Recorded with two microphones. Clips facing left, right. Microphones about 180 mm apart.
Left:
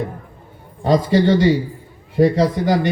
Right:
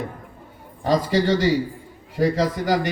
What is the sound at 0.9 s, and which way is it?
A man's voice, 25° left (ahead or behind).